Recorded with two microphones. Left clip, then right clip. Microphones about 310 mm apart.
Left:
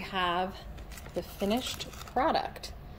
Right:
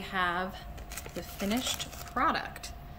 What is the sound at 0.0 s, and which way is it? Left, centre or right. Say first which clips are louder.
Speech: left 1 dB; centre.